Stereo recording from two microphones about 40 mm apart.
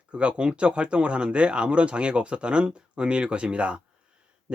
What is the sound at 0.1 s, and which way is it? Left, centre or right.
Speech, right.